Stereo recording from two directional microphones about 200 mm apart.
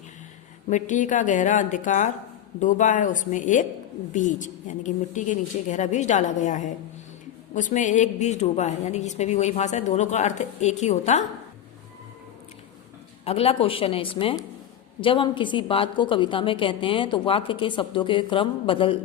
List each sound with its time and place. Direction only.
0.7 s a woman's voice: 40° left (ahead or behind)
13.2 s a woman's voice: 30° left (ahead or behind)